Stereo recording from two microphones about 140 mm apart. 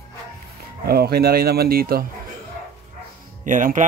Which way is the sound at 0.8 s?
90° right.